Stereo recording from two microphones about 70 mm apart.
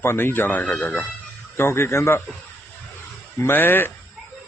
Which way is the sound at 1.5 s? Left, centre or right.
Left.